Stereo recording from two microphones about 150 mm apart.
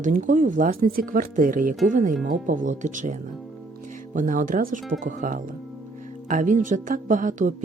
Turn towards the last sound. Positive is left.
turn(degrees=-60)  # may be behind; listen again after turning